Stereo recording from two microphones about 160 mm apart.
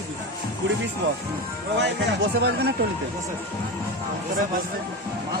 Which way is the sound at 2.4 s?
90° right.